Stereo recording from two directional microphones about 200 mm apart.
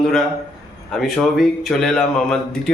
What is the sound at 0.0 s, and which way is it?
Speech, centre (ahead or behind).